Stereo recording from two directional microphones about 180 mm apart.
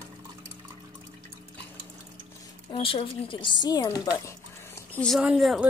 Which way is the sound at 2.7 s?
30° left (ahead or behind).